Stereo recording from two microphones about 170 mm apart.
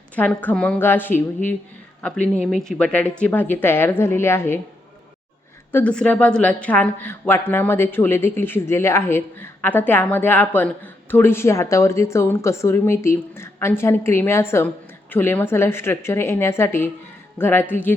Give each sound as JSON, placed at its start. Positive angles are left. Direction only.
{"t": 0.2, "sound": "a woman's voice", "side_deg": 10}
{"t": 5.7, "sound": "a woman's voice", "side_deg": 5}